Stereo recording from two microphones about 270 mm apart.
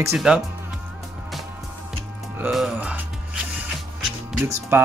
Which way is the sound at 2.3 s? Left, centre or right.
Centre.